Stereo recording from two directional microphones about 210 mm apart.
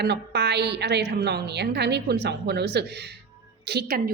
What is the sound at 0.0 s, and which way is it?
A woman's voice, 50° right (ahead or behind).